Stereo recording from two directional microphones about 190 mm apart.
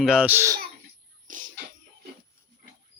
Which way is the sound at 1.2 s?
45° right (ahead or behind).